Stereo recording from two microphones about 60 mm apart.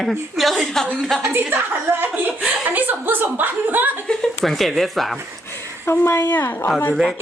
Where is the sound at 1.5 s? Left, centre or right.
Right.